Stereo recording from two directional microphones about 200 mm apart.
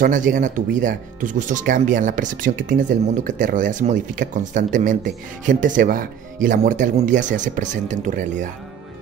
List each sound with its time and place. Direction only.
0.3 s speech: 40° right (ahead or behind)